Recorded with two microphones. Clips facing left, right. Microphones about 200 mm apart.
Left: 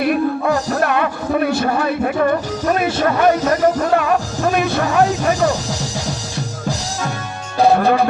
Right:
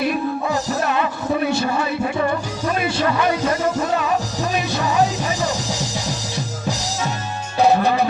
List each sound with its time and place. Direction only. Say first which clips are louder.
0.0 s music: left 4 dB; 55° left (ahead or behind)
7.7 s music: left 4 dB; 55° left (ahead or behind)